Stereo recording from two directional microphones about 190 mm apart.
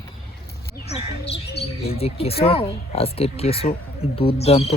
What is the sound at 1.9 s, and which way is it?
Speech, 30° left (ahead or behind).